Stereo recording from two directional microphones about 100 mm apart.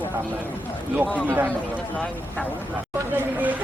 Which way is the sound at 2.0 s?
15° left (ahead or behind).